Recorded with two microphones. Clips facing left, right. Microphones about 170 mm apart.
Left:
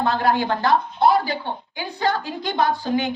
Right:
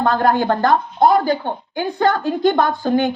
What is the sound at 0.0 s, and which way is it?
Speech, 50° right (ahead or behind).